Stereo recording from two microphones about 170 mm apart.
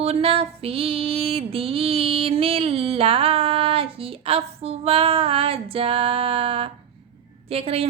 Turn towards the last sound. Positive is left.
turn(degrees=-35)  # may be behind; listen again after turning